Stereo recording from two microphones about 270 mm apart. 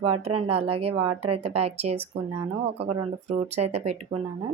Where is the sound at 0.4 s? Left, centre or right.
Right.